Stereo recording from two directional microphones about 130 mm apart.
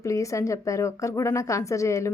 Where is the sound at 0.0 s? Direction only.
25° left (ahead or behind).